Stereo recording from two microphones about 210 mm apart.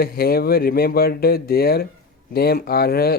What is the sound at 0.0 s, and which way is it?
Speech, 45° left (ahead or behind).